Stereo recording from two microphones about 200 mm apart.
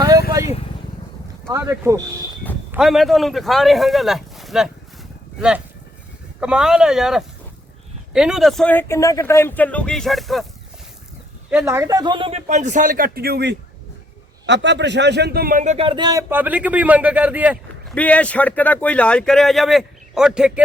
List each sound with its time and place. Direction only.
0.3 s vehicle: 15° right (ahead or behind)
1.5 s speech: 15° right (ahead or behind)
2.7 s speech: centre (ahead or behind)
11.5 s speech: 15° right (ahead or behind)
17.9 s speech: 5° left (ahead or behind)